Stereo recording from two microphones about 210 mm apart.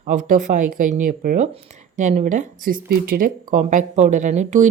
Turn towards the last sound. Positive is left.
turn(degrees=-35)  # may be behind; listen again after turning